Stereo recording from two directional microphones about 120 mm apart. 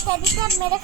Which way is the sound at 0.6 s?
30° right (ahead or behind).